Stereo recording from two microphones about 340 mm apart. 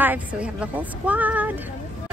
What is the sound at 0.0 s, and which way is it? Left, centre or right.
A woman's voice, centre.